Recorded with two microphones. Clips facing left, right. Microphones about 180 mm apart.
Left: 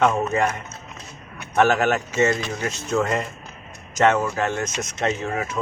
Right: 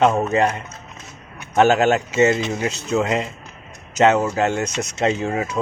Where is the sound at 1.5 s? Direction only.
25° right (ahead or behind).